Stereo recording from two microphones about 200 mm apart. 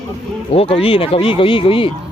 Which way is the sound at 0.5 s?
30° left (ahead or behind).